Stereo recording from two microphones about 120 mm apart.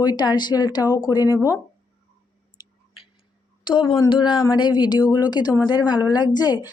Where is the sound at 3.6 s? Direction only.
40° left (ahead or behind).